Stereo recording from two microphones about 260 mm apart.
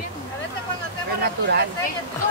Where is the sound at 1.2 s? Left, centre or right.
Right.